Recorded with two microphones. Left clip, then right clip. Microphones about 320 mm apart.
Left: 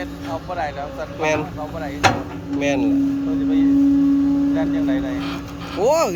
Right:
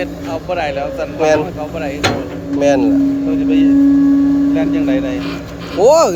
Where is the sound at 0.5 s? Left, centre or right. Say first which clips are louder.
Right 9 dB; right.